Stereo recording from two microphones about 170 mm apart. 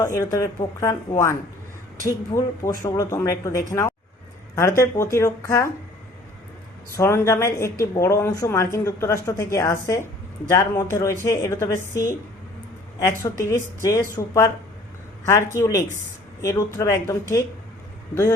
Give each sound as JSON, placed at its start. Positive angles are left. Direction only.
{"t": 0.0, "sound": "speech", "side_deg": 20}
{"t": 6.9, "sound": "speech", "side_deg": 15}
{"t": 13.1, "sound": "speech", "side_deg": 20}
{"t": 15.5, "sound": "speech", "side_deg": 15}